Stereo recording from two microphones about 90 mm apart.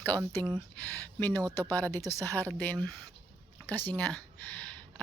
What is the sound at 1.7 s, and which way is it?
Speech, 20° left (ahead or behind).